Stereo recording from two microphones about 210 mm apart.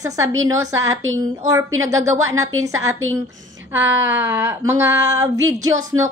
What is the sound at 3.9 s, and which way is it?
Speech, 65° right (ahead or behind).